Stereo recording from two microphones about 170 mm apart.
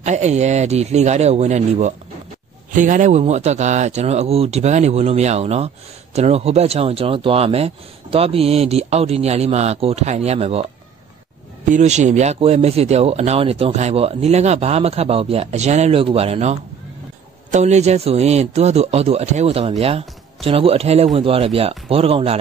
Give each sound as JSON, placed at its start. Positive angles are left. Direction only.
{"t": 0.0, "sound": "speech", "side_deg": -40}
{"t": 11.7, "sound": "speech", "side_deg": -45}